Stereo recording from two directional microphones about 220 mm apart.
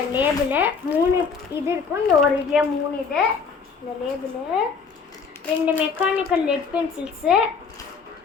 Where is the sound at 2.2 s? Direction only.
Centre (ahead or behind).